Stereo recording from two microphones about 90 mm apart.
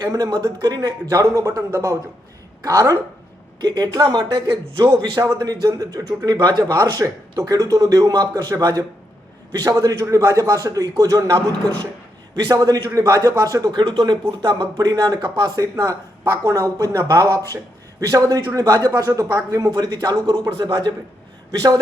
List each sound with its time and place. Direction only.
0.0 s a man's voice: 45° right (ahead or behind)
12.4 s a man's voice: 50° right (ahead or behind)
13.7 s a man's voice: 60° right (ahead or behind)